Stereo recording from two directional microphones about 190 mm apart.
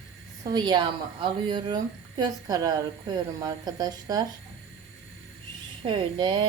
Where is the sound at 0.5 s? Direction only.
20° right (ahead or behind).